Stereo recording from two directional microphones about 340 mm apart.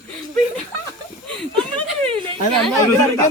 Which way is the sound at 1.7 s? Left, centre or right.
Centre.